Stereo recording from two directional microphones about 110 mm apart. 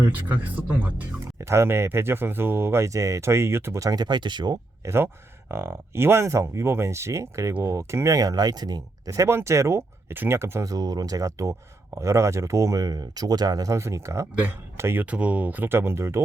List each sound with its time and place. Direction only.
0.0 s speech: 15° right (ahead or behind); by 4.5 s 45° right (ahead or behind)
4.8 s speech: 25° right (ahead or behind)